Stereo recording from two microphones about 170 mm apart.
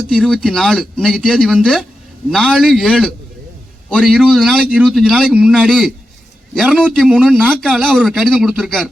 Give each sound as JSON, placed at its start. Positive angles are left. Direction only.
{"t": 0.1, "sound": "a man's voice", "side_deg": 5}